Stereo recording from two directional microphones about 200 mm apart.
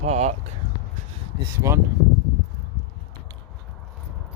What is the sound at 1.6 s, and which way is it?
Speech, 15° right (ahead or behind).